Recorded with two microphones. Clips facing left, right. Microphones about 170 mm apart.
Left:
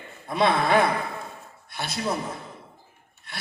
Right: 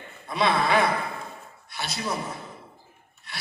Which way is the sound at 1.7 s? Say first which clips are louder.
Left 1 dB; 55° left (ahead or behind).